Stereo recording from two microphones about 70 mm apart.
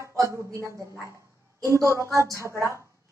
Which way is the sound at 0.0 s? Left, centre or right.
Right.